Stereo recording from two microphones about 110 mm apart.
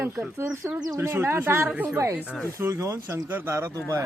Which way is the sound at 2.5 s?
30° right (ahead or behind).